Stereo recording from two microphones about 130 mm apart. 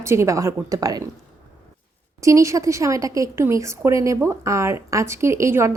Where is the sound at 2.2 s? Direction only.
25° right (ahead or behind).